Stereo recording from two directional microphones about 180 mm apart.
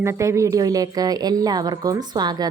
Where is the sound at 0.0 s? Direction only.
15° right (ahead or behind).